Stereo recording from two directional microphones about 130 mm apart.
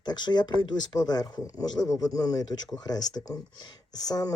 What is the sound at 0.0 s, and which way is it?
Speech, 35° left (ahead or behind).